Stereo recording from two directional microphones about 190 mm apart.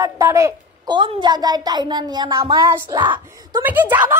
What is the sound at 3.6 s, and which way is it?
Speech, 10° right (ahead or behind).